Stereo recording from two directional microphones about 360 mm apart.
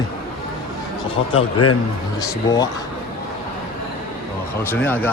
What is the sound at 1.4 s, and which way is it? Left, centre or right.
Speech, left.